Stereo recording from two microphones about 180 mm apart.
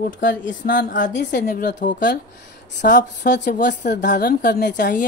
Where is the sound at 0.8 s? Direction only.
45° left (ahead or behind).